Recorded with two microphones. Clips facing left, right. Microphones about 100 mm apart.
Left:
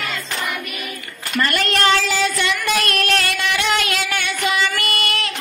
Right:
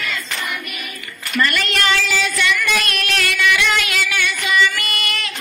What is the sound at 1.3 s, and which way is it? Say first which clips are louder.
Child singing: even; 40° left (ahead or behind).